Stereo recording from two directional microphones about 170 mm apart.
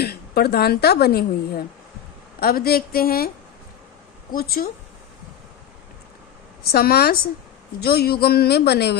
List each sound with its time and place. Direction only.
0.0 s a woman's voice: 65° left (ahead or behind)
4.3 s a woman's voice: 60° left (ahead or behind)
6.6 s a woman's voice: 65° left (ahead or behind)